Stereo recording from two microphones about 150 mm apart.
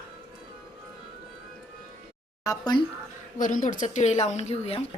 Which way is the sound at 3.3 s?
60° left (ahead or behind).